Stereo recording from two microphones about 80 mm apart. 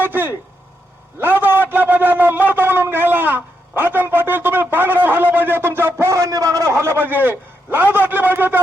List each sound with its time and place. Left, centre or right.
0.0 s vehicle: right
1.2 s shofar: right